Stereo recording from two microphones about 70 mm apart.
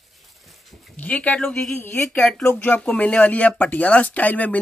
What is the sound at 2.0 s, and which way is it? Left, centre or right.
Speech, centre.